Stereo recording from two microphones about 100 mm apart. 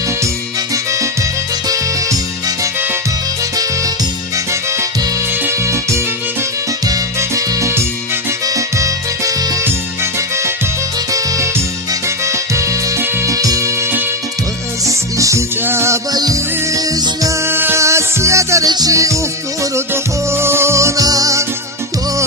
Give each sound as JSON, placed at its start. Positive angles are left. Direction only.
{"t": 0.7, "sound": "music", "side_deg": -30}
{"t": 5.3, "sound": "music", "side_deg": -25}
{"t": 14.8, "sound": "music", "side_deg": -30}
{"t": 16.1, "sound": "music", "side_deg": -40}
{"t": 17.4, "sound": "music", "side_deg": -25}